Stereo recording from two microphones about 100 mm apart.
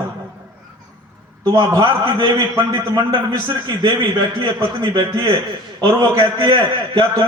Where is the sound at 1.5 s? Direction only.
40° right (ahead or behind).